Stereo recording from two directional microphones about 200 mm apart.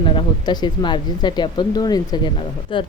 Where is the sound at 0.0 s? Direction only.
25° left (ahead or behind).